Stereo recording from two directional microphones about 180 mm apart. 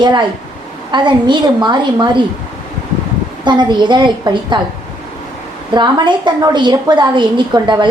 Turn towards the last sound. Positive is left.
turn(degrees=-25)  # may be behind; listen again after turning